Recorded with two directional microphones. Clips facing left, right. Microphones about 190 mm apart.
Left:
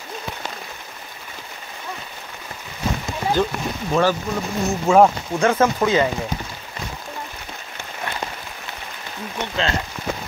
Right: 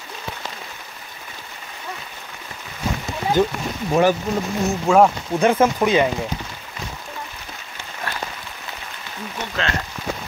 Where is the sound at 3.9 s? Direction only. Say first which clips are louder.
Right 2 dB; 20° right (ahead or behind).